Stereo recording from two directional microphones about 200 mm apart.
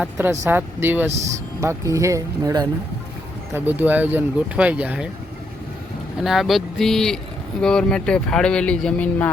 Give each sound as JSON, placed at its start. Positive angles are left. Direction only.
{"t": 0.0, "sound": "speech", "side_deg": -10}
{"t": 6.2, "sound": "speech", "side_deg": 0}